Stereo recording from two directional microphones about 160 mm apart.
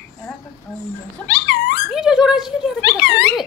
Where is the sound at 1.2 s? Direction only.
90° left.